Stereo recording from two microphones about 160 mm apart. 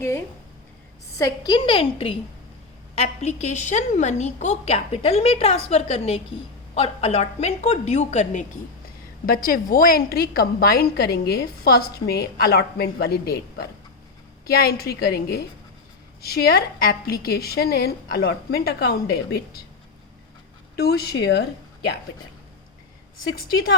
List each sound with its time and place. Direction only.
0.0 s a sound: 15° left (ahead or behind)
1.2 s a woman's voice: 30° left (ahead or behind); by 8.4 s 45° left (ahead or behind)
9.2 s a woman's voice: 65° left (ahead or behind)
20.7 s a woman's voice: 85° left